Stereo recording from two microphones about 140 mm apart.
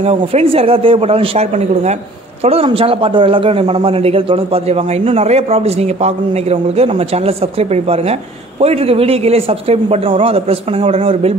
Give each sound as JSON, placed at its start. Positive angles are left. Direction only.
{"t": 0.0, "sound": "speech", "side_deg": -50}
{"t": 2.4, "sound": "speech", "side_deg": -45}